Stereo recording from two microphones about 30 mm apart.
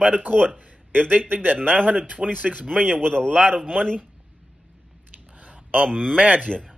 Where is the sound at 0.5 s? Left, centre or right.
Right.